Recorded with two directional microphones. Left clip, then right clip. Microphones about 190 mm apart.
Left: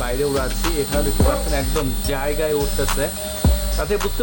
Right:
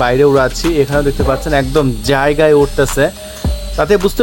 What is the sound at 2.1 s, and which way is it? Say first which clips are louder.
Speech: right 12 dB; 35° right (ahead or behind).